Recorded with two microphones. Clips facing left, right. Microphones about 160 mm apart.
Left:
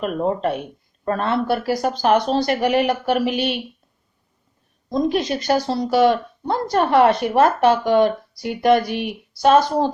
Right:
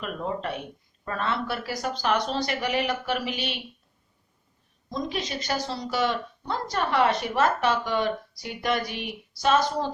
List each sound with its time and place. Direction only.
0.0 s speech: 45° left (ahead or behind)
5.0 s a woman's voice: 55° left (ahead or behind)